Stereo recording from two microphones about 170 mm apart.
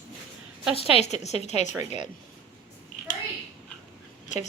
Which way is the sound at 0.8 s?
35° left (ahead or behind).